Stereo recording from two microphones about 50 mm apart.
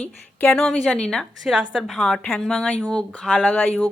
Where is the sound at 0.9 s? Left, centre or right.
Centre.